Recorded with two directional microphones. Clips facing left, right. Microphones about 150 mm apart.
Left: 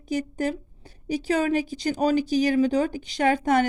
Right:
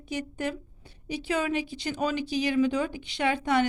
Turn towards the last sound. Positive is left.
turn(degrees=45)  # may be behind; listen again after turning